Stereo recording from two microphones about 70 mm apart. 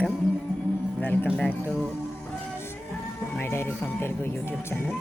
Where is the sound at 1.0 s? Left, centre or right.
Left.